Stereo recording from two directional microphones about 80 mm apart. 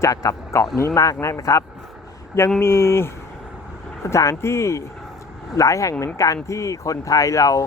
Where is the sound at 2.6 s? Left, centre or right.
Left.